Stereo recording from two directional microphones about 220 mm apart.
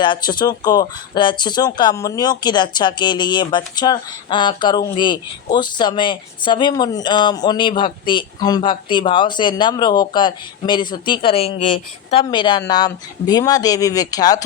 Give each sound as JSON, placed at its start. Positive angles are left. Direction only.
{"t": 0.0, "sound": "speech", "side_deg": 20}